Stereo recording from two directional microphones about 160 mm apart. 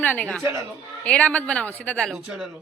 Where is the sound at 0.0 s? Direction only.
10° left (ahead or behind).